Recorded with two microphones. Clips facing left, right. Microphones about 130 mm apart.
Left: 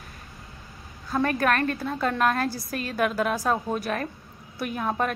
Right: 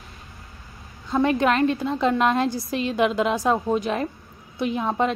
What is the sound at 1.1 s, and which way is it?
A woman's voice, 20° right (ahead or behind).